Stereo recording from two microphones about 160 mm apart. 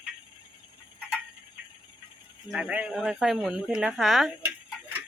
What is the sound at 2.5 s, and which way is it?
Speech, 5° right (ahead or behind).